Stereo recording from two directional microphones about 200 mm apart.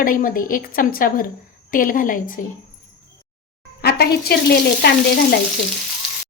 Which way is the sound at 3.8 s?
50° left (ahead or behind).